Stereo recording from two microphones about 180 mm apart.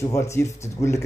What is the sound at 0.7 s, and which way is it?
Speech, 15° left (ahead or behind).